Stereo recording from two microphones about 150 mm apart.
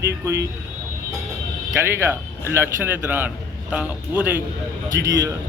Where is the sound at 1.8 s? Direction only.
15° right (ahead or behind).